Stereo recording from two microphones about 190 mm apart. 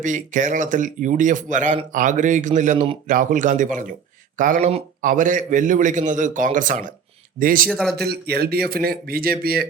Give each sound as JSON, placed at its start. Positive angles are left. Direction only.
{"t": 0.0, "sound": "a man's voice", "side_deg": -40}
{"t": 7.7, "sound": "a man's voice", "side_deg": 0}
{"t": 7.9, "sound": "a man's voice", "side_deg": -55}